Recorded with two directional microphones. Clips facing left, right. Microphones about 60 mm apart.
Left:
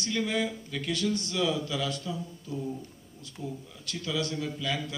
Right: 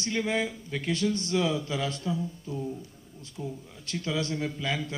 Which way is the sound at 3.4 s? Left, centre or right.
Right.